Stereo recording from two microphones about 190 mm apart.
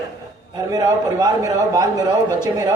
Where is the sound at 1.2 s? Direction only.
20° right (ahead or behind).